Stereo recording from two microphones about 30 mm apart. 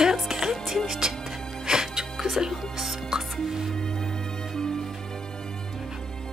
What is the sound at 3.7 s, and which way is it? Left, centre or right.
Music, left.